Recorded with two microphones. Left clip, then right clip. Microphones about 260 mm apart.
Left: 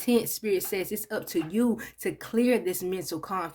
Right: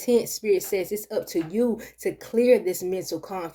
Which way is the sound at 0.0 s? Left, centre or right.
Left.